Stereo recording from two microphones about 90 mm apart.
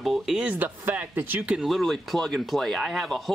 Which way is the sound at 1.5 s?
Centre (ahead or behind).